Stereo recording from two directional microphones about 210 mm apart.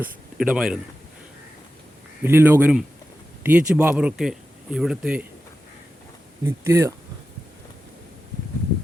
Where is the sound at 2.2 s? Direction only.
10° right (ahead or behind).